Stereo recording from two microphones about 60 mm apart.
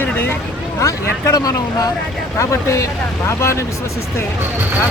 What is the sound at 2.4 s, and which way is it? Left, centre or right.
Speech, left.